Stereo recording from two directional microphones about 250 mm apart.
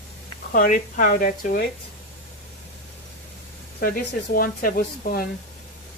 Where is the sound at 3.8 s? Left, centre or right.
Left.